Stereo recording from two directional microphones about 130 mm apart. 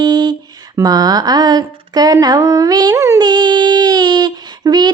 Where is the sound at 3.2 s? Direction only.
35° right (ahead or behind).